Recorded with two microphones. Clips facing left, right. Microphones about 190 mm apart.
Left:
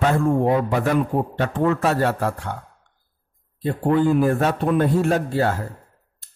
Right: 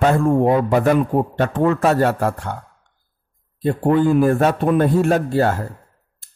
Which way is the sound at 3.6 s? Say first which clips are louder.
Right 3 dB; 50° right (ahead or behind).